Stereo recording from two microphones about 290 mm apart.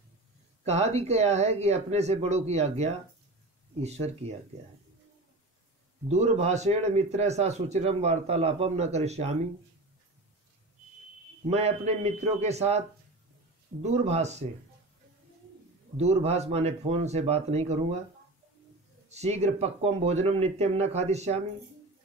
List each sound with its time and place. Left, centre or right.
0.7 s a man's voice: right
6.0 s a man's voice: right
11.5 s a man's voice: right
13.8 s a man's voice: right
16.0 s a man's voice: right
19.0 s a man's voice: right